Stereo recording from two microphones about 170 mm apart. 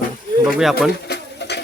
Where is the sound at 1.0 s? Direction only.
75° left (ahead or behind).